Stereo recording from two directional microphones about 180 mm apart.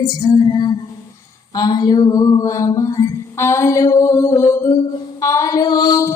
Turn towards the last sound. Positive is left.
turn(degrees=20)  # may be behind; listen again after turning